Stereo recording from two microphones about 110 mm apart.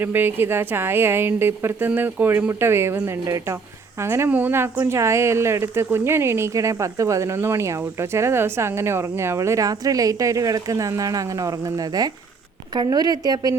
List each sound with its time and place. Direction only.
0.0 s a woman's voice: 20° right (ahead or behind)
12.7 s a woman's voice: 40° right (ahead or behind)